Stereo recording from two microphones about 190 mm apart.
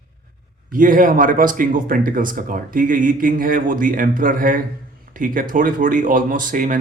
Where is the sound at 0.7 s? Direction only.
45° right (ahead or behind).